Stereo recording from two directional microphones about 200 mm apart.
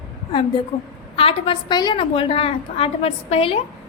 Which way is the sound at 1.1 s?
25° left (ahead or behind).